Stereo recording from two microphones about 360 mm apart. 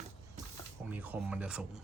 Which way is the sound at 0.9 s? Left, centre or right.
Centre.